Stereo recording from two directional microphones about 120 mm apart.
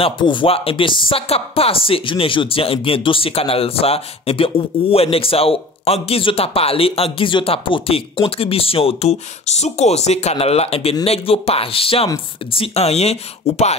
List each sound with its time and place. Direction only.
0.0 s speech: 40° left (ahead or behind); by 13.7 s 60° left (ahead or behind)